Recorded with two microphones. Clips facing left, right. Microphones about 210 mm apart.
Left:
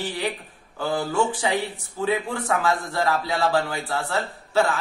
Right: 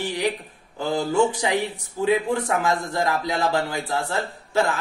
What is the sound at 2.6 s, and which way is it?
Speech, 15° right (ahead or behind).